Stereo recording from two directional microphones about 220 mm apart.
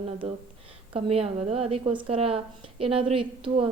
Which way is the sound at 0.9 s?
25° right (ahead or behind).